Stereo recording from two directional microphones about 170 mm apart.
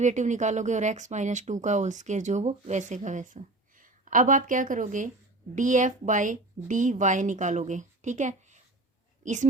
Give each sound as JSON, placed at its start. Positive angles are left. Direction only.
{"t": 0.0, "sound": "speech", "side_deg": -45}